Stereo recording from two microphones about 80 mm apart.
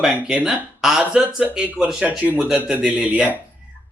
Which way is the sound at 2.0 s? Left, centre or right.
Right.